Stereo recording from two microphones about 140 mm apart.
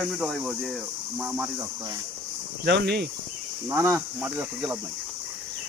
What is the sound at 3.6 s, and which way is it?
Speech, 20° right (ahead or behind).